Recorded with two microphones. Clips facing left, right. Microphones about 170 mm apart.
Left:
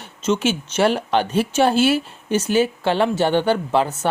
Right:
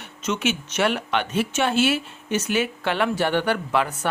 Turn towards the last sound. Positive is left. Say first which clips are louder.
# left 4 dB
turn(degrees=25)  # may be behind; listen again after turning